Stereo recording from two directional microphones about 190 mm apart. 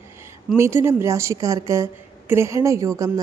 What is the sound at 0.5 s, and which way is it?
A woman's voice, 15° right (ahead or behind).